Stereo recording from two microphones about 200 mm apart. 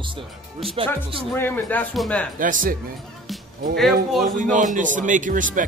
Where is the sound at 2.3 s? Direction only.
40° right (ahead or behind).